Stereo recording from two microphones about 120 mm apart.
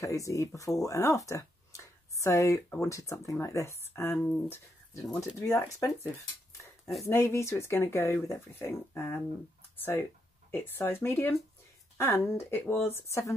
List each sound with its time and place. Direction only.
0.0 s speech: 25° left (ahead or behind)
7.0 s speech: 20° left (ahead or behind)